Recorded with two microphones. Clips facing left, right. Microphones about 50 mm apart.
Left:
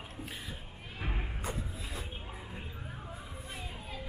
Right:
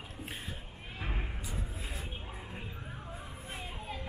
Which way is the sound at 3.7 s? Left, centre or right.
Centre.